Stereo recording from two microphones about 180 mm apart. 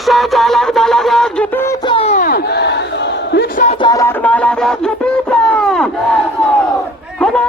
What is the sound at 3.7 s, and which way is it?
Music, 20° left (ahead or behind).